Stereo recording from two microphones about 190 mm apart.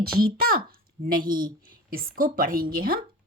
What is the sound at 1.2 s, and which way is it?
Speech, 20° right (ahead or behind).